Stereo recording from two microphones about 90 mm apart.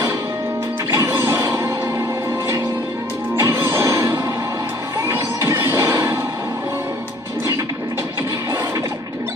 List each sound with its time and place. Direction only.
0.9 s music: 30° right (ahead or behind)
5.1 s music: 25° right (ahead or behind)